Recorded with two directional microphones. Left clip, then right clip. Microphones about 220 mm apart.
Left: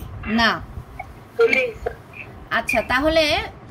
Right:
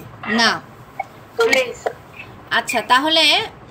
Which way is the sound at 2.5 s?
30° left (ahead or behind).